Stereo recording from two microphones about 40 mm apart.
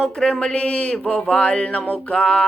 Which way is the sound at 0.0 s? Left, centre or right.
Centre.